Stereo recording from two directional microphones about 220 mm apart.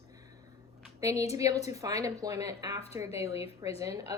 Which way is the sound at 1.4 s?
15° right (ahead or behind).